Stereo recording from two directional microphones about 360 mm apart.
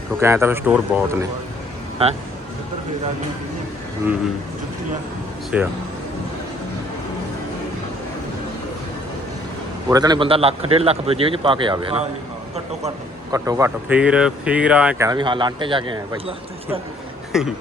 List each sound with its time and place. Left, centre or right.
0.2 s speech: centre
5.5 s speech: centre
9.9 s speech: centre
13.3 s speech: centre
17.3 s speech: centre